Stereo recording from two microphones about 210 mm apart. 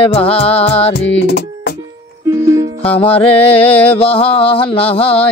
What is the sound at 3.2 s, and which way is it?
Music, 5° left (ahead or behind).